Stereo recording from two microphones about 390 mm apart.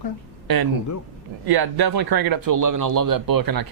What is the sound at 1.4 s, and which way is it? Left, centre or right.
Speech, right.